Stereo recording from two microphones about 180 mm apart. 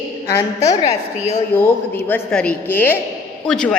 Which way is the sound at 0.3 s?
20° left (ahead or behind).